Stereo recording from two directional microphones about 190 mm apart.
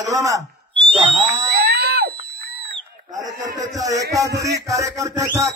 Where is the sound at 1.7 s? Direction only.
55° right (ahead or behind).